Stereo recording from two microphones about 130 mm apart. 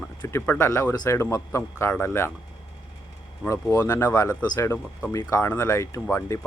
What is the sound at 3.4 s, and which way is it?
Speech, 20° left (ahead or behind).